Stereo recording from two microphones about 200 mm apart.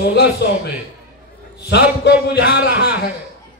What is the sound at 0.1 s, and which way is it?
Music, 55° left (ahead or behind).